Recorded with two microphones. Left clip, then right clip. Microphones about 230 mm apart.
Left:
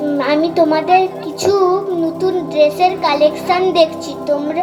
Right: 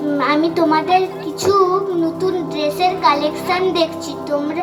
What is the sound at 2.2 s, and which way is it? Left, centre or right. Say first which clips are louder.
A woman's voice: left 6 dB; centre.